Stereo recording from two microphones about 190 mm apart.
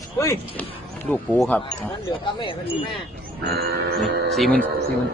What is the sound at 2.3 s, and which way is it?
Speech, 25° left (ahead or behind).